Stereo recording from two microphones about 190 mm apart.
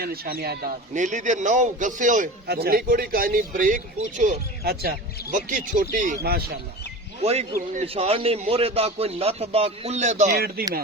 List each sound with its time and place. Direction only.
0.0 s a man's voice: 55° right (ahead or behind)
0.9 s a man's voice: 40° right (ahead or behind)
7.2 s a man's voice: 35° right (ahead or behind)
10.3 s a man's voice: 50° right (ahead or behind)